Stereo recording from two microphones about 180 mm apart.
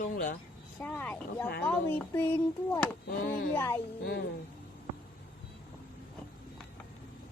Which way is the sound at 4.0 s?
65° left (ahead or behind).